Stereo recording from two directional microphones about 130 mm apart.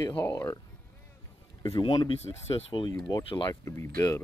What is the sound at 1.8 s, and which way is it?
Speech, 35° left (ahead or behind).